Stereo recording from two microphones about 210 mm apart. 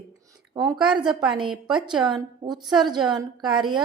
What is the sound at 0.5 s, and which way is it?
Speech, 20° right (ahead or behind).